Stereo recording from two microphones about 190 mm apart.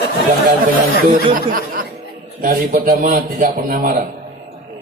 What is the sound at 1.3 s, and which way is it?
Speech, 45° right (ahead or behind).